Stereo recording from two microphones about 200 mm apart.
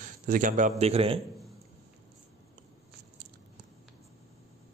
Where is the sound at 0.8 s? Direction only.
30° right (ahead or behind).